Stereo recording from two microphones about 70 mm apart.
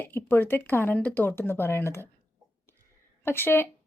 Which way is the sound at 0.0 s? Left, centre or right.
Left.